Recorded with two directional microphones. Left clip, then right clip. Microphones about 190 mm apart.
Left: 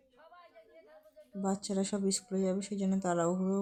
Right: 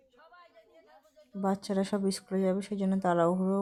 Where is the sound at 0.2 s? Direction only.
55° right (ahead or behind).